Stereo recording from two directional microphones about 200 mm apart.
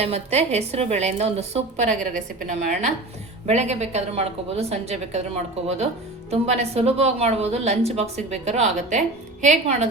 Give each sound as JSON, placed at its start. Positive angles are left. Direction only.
{"t": 0.0, "sound": "a woman's voice", "side_deg": -30}
{"t": 6.3, "sound": "a woman's voice", "side_deg": -30}